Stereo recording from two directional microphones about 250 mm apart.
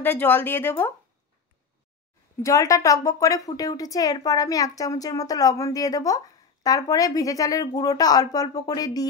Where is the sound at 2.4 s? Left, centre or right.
Centre.